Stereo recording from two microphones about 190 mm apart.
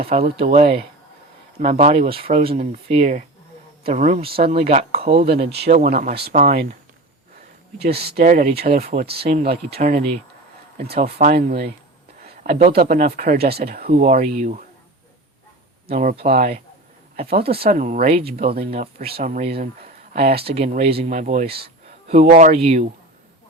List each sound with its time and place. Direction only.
0.0 s speech: 30° right (ahead or behind)
5.5 s speech: 60° right (ahead or behind)
5.7 s speech: 45° right (ahead or behind)
7.8 s speech: 55° right (ahead or behind)
12.2 s a sound: 50° right (ahead or behind)
12.7 s speech: 50° right (ahead or behind)
15.9 s speech: 45° right (ahead or behind)
18.3 s speech: 55° right (ahead or behind); by 22.9 s 30° right (ahead or behind)